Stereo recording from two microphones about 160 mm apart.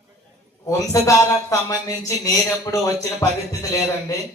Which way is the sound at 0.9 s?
20° left (ahead or behind).